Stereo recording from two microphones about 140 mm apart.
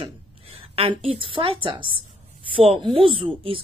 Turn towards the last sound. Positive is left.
turn(degrees=-40)  # may be behind; listen again after turning